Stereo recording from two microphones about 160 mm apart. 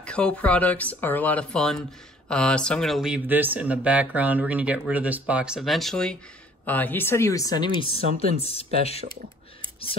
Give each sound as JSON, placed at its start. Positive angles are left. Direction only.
{"t": 0.0, "sound": "speech", "side_deg": 5}